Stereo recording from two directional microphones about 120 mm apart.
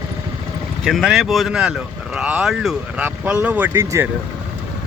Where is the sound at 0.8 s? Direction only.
Centre (ahead or behind).